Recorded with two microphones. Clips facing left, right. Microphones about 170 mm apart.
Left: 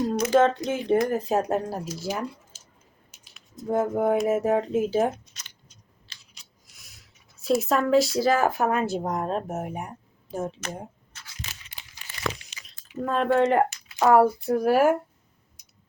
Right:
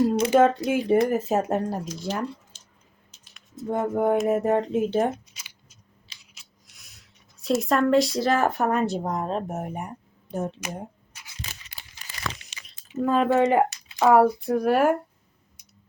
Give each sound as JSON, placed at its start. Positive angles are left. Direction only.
{"t": 0.3, "sound": "speech", "side_deg": -10}
{"t": 3.1, "sound": "typing", "side_deg": 0}
{"t": 3.9, "sound": "speech", "side_deg": 0}
{"t": 11.1, "sound": "a sound", "side_deg": -10}
{"t": 12.0, "sound": "crumpling", "side_deg": -40}
{"t": 12.5, "sound": "a sound", "side_deg": -80}
{"t": 13.0, "sound": "speech", "side_deg": -5}